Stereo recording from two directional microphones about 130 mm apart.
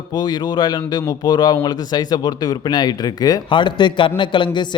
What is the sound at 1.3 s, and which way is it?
A man's voice, 30° left (ahead or behind).